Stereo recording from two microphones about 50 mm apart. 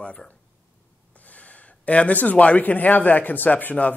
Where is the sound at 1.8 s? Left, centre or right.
Left.